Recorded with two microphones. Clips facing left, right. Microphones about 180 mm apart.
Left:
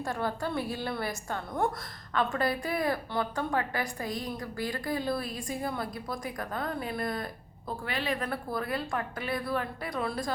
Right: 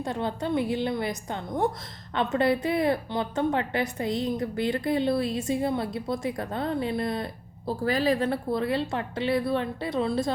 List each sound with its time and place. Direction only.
0.0 s a woman's voice: 20° right (ahead or behind)
7.7 s a woman's voice: 35° right (ahead or behind)